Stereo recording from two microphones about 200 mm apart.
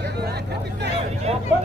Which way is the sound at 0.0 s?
55° right (ahead or behind).